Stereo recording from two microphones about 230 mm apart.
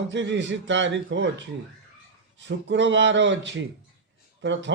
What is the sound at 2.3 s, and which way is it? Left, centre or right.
A man's voice, right.